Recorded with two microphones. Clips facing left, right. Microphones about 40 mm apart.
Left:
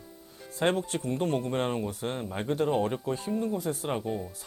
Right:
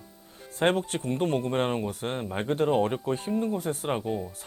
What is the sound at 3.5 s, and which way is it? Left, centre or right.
Speech, right.